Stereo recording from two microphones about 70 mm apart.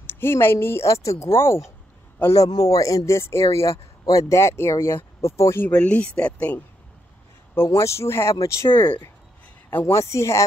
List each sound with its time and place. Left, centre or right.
0.0 s speech: left
2.3 s a man's voice: left
3.1 s speech: left
5.7 s speech: centre
7.5 s speech: left
9.7 s a woman's voice: left
9.9 s speech: left